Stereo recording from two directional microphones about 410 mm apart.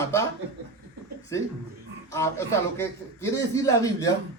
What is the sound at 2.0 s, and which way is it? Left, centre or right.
Speech, centre.